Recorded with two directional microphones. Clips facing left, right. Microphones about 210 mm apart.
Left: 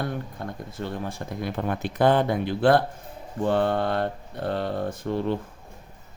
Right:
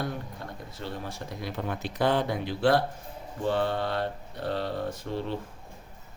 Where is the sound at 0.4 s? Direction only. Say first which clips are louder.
Left 6 dB; 55° left (ahead or behind).